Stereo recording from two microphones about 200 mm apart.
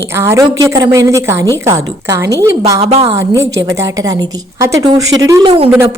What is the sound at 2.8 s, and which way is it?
Speech, 30° right (ahead or behind).